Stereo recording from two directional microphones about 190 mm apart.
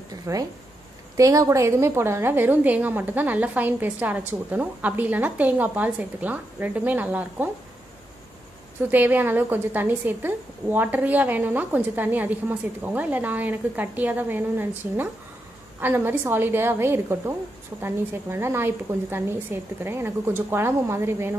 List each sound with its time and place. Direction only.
0.1 s a woman's voice: 20° right (ahead or behind)
8.9 s a woman's voice: 10° right (ahead or behind)
15.8 s a woman's voice: 10° right (ahead or behind)